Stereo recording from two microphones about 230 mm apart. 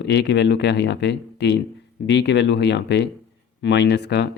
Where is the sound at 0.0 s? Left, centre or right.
Left.